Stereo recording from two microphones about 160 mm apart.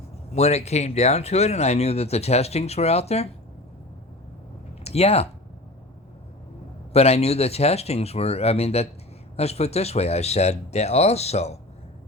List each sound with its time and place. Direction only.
0.3 s speech: 40° left (ahead or behind)
4.8 s speech: 40° left (ahead or behind)
6.9 s speech: 40° left (ahead or behind)